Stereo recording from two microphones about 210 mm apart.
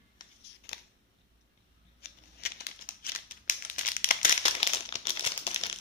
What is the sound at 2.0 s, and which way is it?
Crumpling, 50° left (ahead or behind).